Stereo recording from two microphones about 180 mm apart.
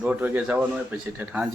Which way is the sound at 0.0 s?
10° right (ahead or behind).